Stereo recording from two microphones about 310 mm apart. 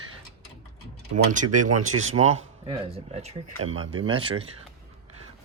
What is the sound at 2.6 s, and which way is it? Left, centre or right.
Speech, centre.